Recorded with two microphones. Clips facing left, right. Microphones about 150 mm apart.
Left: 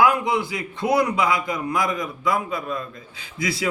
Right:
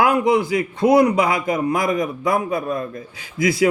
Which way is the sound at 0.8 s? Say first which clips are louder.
Right 5 dB; 25° right (ahead or behind).